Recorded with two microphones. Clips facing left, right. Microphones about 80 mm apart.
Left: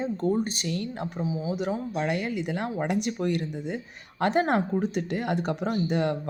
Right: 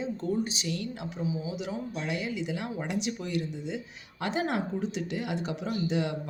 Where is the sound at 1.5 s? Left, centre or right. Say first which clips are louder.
Left 6 dB; left.